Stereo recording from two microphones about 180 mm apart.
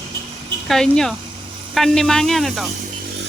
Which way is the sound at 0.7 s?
Centre (ahead or behind).